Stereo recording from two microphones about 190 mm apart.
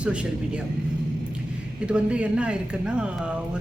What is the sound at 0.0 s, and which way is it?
Speech, 5° right (ahead or behind).